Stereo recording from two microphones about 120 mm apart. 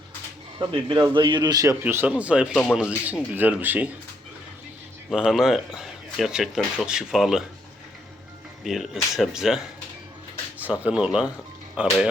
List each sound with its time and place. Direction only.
0.6 s a man's voice: 45° right (ahead or behind)
1.8 s speech: 15° right (ahead or behind)
5.1 s speech: 5° right (ahead or behind)
8.6 s speech: centre (ahead or behind)